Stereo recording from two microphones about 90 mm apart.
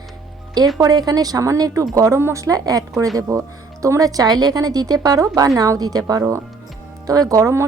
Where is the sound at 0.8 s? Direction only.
45° right (ahead or behind).